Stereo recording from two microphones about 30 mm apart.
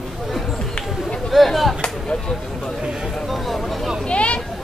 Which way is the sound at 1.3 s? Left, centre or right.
Centre.